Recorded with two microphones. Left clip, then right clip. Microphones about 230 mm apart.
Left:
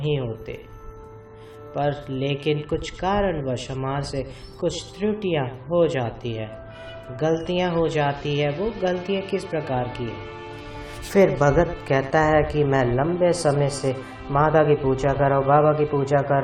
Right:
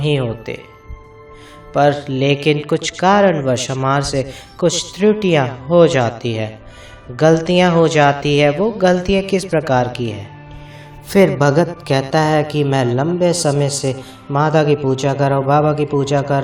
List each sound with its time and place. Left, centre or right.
0.0 s speech: right
1.7 s speech: right
12.6 s speech: right